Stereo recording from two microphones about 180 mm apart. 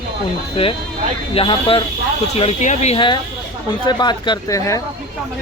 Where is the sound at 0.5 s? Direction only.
30° left (ahead or behind).